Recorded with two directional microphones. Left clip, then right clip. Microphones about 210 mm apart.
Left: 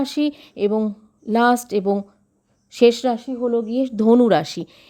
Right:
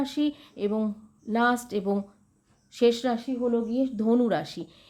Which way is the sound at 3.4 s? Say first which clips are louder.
Left 5 dB; 45° left (ahead or behind).